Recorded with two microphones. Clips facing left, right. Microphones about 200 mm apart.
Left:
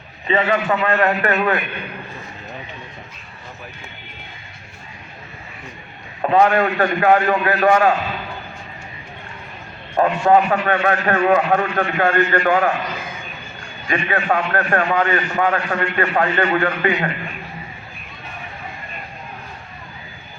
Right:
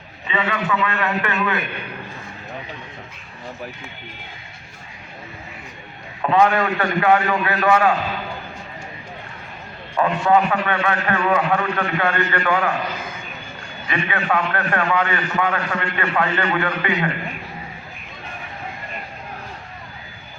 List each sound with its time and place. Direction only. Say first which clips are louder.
0.3 s a man's voice: left 5 dB; 40° left (ahead or behind)
6.3 s a man's voice: left 2 dB; 40° left (ahead or behind)
9.9 s a man's voice: left 3 dB; 40° left (ahead or behind)
13.8 s a man's voice: left 3 dB; 40° left (ahead or behind)